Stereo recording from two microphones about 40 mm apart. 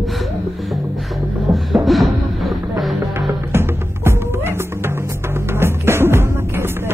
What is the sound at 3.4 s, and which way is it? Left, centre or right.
Music, right.